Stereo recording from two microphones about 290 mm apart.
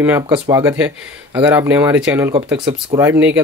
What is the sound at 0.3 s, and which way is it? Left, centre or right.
Speech, centre.